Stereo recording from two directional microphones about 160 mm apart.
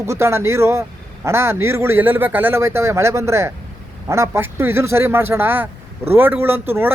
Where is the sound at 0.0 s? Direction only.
15° right (ahead or behind).